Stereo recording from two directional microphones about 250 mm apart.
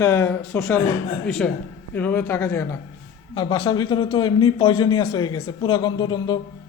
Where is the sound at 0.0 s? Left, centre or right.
Centre.